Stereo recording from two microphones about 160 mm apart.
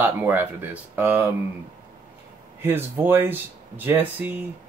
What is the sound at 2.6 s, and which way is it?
Speech, 15° right (ahead or behind).